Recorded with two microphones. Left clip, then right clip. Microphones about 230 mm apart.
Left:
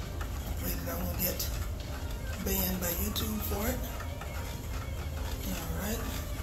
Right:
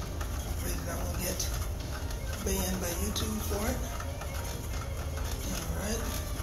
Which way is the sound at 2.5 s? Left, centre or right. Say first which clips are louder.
Right 1 dB; left.